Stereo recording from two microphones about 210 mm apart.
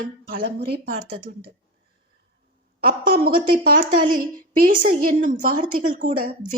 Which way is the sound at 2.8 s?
45° right (ahead or behind).